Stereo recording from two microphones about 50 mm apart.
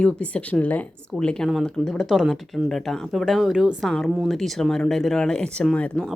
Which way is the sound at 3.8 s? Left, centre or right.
Centre.